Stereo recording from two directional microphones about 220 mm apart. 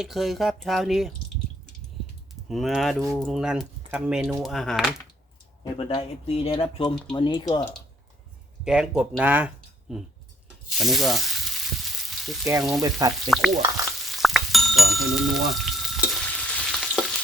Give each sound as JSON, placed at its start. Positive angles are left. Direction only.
{"t": 0.0, "sound": "speech", "side_deg": 0}
{"t": 2.5, "sound": "speech", "side_deg": 0}
{"t": 5.7, "sound": "speech", "side_deg": 25}
{"t": 8.6, "sound": "speech", "side_deg": -5}
{"t": 10.8, "sound": "frying", "side_deg": 0}
{"t": 12.8, "sound": "speech", "side_deg": -15}
{"t": 13.3, "sound": "speech", "side_deg": 0}
{"t": 14.0, "sound": "frying", "side_deg": 0}